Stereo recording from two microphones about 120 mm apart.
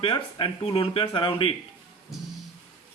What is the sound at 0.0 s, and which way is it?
A man's voice, 40° left (ahead or behind).